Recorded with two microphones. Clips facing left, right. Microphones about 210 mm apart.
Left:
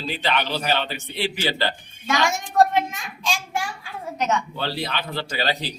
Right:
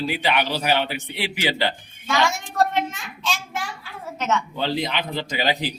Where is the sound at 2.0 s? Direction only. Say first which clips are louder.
Even; 15° left (ahead or behind).